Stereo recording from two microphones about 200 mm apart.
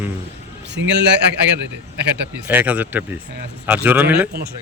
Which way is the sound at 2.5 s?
10° right (ahead or behind).